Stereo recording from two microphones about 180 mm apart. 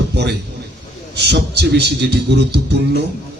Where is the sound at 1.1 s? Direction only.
65° right (ahead or behind).